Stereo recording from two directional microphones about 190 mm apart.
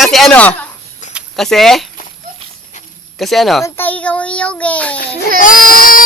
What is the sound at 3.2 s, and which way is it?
A child's voice, centre (ahead or behind).